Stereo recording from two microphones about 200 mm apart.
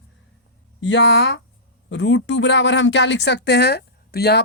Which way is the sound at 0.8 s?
65° left (ahead or behind).